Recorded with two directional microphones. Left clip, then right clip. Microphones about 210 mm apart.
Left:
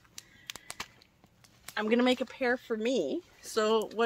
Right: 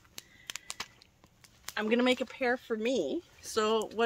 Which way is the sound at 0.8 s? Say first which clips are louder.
Even; 15° left (ahead or behind).